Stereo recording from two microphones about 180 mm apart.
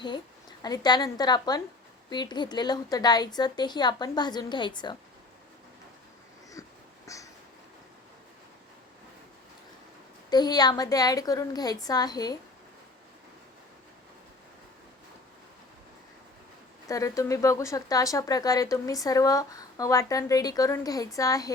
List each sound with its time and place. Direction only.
0.6 s speech: 20° left (ahead or behind)
7.1 s a sound: 20° left (ahead or behind)
10.2 s speech: 20° left (ahead or behind)
16.9 s speech: 20° left (ahead or behind)